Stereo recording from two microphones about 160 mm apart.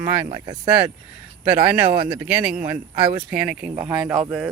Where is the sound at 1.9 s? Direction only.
30° right (ahead or behind).